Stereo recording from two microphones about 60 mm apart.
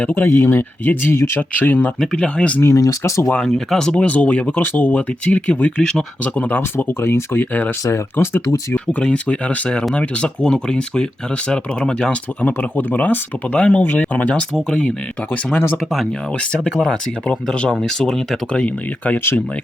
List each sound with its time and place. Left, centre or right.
0.2 s speech: left
1.1 s speech: left
1.4 s speech: left
2.6 s speech: left
3.3 s speech: centre
4.0 s speech: left
4.6 s speech: left; by 6.1 s centre
6.2 s speech: left
6.6 s speech: left; by 12.5 s centre
12.5 s speech: left
14.5 s speech: centre
16.8 s speech: centre